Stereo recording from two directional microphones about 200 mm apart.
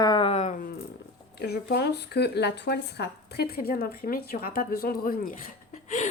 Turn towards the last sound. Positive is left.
turn(degrees=40)  # may be behind; listen again after turning